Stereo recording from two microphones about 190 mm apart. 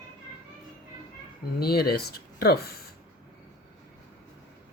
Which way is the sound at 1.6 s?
55° left (ahead or behind).